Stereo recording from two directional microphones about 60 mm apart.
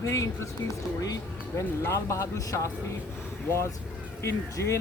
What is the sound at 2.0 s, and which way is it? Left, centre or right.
Speech, left.